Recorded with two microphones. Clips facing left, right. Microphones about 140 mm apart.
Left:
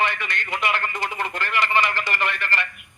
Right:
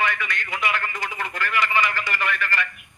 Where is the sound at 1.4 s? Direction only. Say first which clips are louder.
Even; 30° left (ahead or behind).